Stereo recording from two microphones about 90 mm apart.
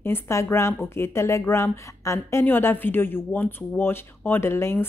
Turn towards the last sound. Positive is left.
turn(degrees=25)  # may be behind; listen again after turning